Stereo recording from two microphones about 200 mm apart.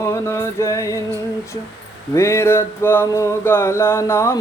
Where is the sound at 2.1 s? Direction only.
15° left (ahead or behind).